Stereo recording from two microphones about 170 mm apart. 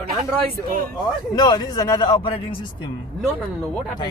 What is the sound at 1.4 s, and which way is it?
A man's voice, 25° left (ahead or behind).